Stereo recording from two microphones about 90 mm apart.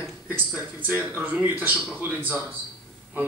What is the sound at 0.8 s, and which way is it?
Speech, 20° right (ahead or behind).